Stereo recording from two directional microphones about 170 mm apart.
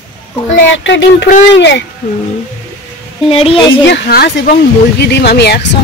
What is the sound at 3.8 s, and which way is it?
Speech, 75° left (ahead or behind).